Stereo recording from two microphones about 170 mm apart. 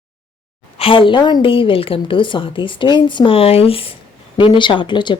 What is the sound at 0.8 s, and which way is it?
A woman's voice, 30° left (ahead or behind).